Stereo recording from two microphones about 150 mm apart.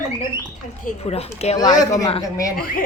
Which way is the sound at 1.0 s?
45° left (ahead or behind).